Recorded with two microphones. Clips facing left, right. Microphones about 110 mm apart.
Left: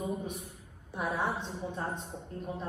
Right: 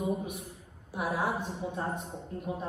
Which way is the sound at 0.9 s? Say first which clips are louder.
Right 2 dB; 5° right (ahead or behind).